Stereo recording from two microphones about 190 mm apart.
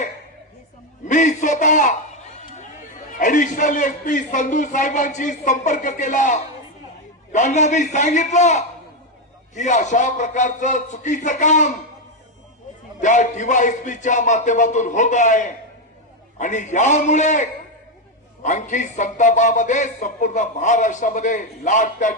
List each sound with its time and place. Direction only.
1.0 s a man's voice: 40° left (ahead or behind)
13.0 s a man's voice: 40° left (ahead or behind)